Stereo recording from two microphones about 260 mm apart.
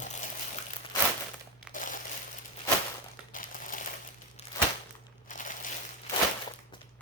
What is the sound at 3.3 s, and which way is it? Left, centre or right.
Crumpling, left.